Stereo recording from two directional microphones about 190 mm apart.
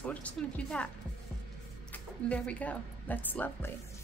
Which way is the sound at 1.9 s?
5° left (ahead or behind).